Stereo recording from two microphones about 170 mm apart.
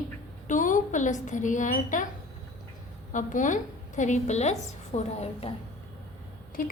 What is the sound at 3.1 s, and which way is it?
A woman's voice, 50° left (ahead or behind).